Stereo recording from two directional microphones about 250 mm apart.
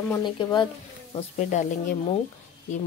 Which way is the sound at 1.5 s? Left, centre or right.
Left.